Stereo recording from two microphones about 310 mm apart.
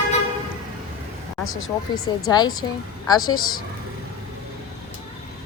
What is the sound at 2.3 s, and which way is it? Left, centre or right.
Speech, centre.